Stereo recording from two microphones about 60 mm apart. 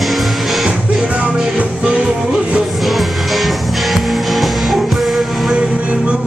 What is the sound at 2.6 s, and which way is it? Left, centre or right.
Music, centre.